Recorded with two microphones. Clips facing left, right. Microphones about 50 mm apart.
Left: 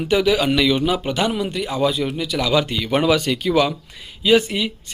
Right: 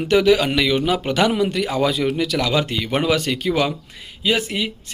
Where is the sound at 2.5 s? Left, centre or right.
Right.